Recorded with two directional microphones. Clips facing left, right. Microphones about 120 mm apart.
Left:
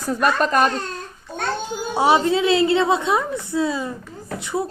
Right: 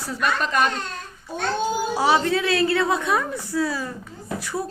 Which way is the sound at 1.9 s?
20° left (ahead or behind).